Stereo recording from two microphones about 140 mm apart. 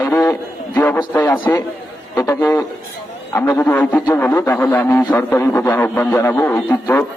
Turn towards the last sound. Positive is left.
turn(degrees=15)  # may be behind; listen again after turning